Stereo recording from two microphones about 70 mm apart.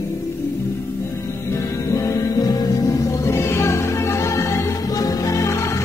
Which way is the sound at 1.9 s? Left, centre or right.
Left.